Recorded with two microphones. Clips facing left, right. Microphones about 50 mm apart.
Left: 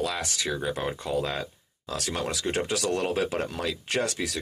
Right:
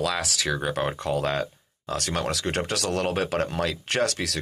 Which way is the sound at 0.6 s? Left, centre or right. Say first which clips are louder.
Right 3 dB; right.